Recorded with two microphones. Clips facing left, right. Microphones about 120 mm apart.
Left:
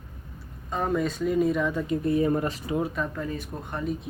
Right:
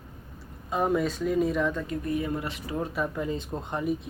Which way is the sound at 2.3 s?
45° left (ahead or behind).